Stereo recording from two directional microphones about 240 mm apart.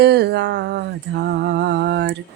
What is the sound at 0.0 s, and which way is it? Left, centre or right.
Speech, right.